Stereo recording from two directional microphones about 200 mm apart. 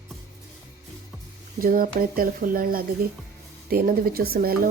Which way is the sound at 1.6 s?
45° right (ahead or behind).